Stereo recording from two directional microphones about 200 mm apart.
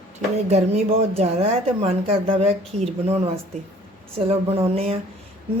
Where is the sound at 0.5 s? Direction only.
30° right (ahead or behind).